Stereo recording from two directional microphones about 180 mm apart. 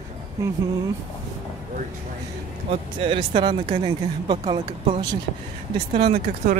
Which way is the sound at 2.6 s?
30° right (ahead or behind).